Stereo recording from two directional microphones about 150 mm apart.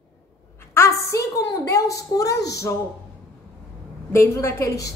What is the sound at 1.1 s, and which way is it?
A woman's voice, 20° left (ahead or behind).